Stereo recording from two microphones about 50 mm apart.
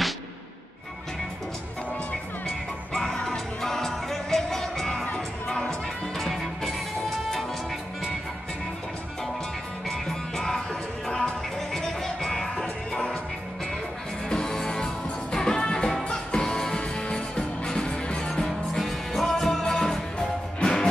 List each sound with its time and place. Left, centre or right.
2.9 s music: centre
9.8 s music: centre
14.3 s music: centre
18.7 s music: centre